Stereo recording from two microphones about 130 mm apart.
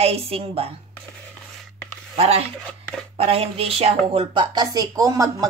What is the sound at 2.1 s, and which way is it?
A woman's voice, 50° right (ahead or behind).